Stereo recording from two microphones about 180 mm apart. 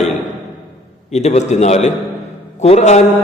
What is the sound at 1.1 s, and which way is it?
A man's voice, 40° left (ahead or behind).